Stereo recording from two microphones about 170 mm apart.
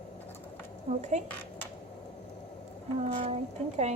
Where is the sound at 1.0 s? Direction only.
45° right (ahead or behind).